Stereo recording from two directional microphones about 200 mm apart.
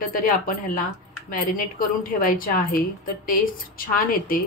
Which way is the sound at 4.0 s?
45° left (ahead or behind).